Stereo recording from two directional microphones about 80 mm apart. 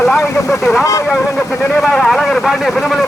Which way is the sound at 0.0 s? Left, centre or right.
Centre.